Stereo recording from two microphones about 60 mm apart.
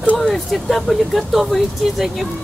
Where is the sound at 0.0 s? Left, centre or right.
Left.